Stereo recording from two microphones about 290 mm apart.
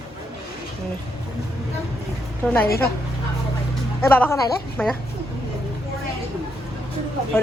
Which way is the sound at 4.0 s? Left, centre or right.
Centre.